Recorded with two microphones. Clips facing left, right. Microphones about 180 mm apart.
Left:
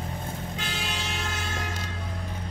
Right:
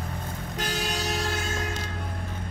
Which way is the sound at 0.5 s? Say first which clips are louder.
Right 3 dB; 40° right (ahead or behind).